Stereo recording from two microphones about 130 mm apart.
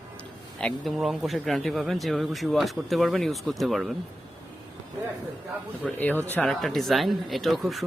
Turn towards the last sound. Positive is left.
turn(degrees=0)  # may be behind; listen again after turning